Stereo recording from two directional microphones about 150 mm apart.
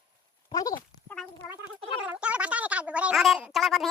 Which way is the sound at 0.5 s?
25° left (ahead or behind).